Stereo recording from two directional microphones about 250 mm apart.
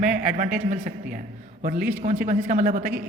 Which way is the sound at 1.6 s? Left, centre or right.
Right.